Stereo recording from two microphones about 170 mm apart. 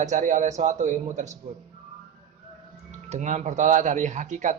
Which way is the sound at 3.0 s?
45° right (ahead or behind).